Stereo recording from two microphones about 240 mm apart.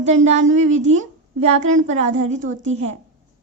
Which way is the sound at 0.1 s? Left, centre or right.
Right.